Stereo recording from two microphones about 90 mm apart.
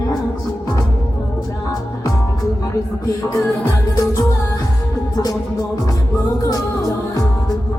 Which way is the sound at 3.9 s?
35° left (ahead or behind).